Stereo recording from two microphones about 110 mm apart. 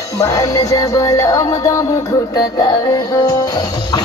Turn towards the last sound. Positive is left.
turn(degrees=35)  # may be behind; listen again after turning